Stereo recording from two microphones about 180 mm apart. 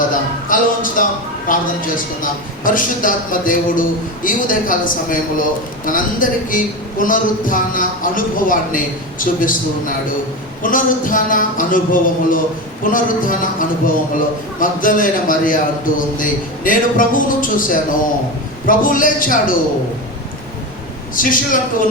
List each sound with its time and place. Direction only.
0.1 s a sound: 50° left (ahead or behind)
1.5 s a man's voice: 50° left (ahead or behind)
21.2 s a man's voice: 50° left (ahead or behind)